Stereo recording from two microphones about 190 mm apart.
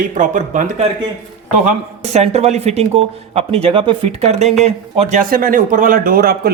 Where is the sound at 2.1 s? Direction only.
35° right (ahead or behind).